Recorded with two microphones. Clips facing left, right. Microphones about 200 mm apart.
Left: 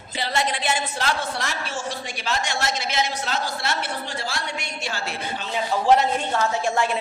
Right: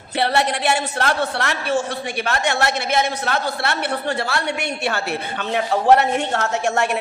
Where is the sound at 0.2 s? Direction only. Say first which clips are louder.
Right 6 dB; 65° right (ahead or behind).